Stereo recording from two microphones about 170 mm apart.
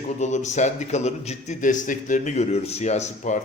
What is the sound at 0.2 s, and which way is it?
A man's voice, 45° left (ahead or behind).